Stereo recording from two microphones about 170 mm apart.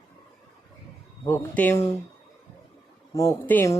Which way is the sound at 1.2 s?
10° left (ahead or behind).